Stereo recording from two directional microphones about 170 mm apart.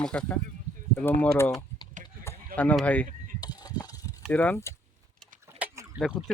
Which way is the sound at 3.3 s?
25° left (ahead or behind).